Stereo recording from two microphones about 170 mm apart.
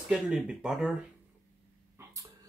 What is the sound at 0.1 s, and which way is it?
Speech, 5° right (ahead or behind).